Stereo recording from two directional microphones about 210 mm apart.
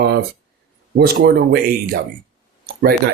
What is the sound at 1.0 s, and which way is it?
Speech, 50° right (ahead or behind).